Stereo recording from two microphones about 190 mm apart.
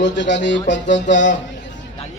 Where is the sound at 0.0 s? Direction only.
70° left (ahead or behind).